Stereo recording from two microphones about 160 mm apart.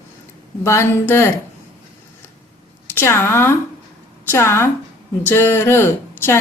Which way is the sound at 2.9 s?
15° left (ahead or behind).